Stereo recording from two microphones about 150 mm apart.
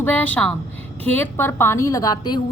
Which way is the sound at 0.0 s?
10° left (ahead or behind).